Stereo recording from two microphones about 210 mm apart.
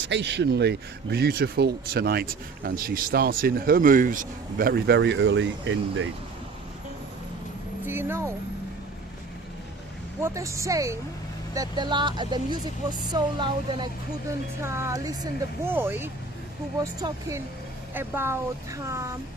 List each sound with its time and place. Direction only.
0.1 s speech: 55° right (ahead or behind)
7.9 s a woman's voice: 10° right (ahead or behind)
10.2 s a woman's voice: 15° right (ahead or behind)